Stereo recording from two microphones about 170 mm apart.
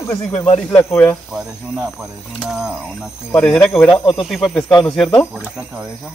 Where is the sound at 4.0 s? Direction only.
30° left (ahead or behind).